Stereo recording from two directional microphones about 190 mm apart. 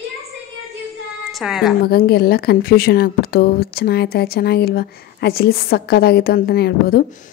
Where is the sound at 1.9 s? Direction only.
55° left (ahead or behind).